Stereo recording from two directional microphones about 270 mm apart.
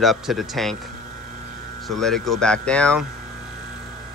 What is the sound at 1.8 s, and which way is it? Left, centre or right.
Speech, centre.